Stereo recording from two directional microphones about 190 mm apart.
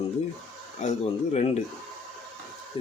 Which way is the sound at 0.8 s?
35° left (ahead or behind).